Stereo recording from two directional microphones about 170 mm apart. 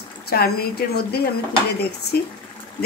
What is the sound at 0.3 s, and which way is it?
A woman's voice, 65° left (ahead or behind).